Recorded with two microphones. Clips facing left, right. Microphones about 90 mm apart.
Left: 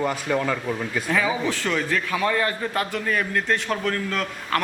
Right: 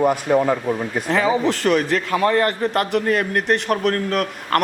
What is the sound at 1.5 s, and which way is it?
Speech, 65° right (ahead or behind).